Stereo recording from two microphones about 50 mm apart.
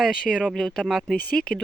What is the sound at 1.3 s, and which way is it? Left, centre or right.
Speech, centre.